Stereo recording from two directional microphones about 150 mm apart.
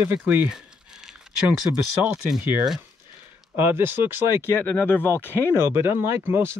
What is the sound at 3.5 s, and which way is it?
Speech, 15° right (ahead or behind).